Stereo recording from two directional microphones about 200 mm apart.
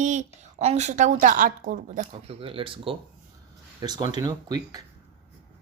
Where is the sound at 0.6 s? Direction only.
35° right (ahead or behind).